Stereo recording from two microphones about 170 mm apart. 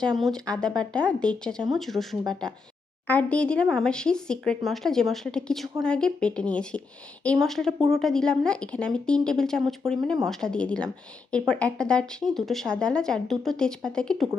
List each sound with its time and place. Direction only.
0.0 s speech: centre (ahead or behind)